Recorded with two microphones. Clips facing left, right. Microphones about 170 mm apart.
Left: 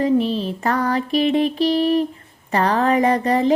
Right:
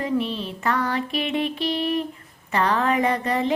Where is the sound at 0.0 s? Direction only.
35° left (ahead or behind).